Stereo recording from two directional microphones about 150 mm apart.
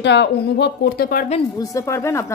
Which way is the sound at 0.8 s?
85° left.